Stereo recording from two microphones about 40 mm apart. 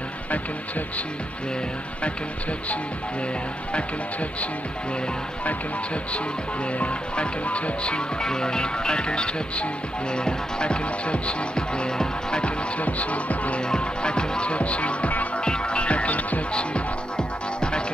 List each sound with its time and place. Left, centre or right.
6.8 s music: left
12.8 s music: left
13.7 s music: left
15.4 s music: left
16.5 s music: left